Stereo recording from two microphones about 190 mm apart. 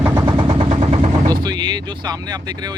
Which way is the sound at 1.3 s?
20° right (ahead or behind).